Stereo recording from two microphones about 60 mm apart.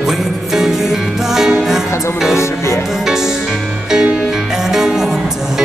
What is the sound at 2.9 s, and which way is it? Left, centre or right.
Music, centre.